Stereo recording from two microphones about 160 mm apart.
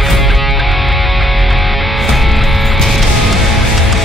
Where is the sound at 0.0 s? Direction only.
Centre (ahead or behind).